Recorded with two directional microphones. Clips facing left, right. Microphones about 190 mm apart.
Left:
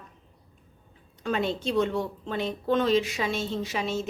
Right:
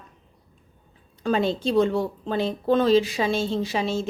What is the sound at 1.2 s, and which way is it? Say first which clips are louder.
Speech: right 5 dB; 35° right (ahead or behind).